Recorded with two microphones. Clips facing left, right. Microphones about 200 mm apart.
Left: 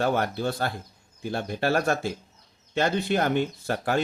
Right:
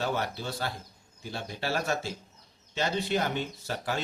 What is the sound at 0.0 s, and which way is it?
Speech, 55° left (ahead or behind).